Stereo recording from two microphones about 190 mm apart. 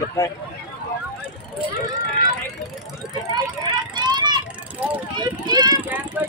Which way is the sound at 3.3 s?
20° right (ahead or behind).